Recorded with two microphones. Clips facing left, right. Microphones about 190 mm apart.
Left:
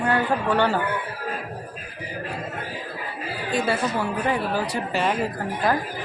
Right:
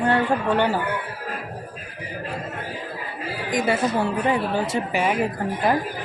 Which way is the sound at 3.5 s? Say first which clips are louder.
Right 2 dB; 15° right (ahead or behind).